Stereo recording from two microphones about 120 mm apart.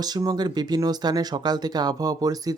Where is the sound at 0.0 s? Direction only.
30° right (ahead or behind).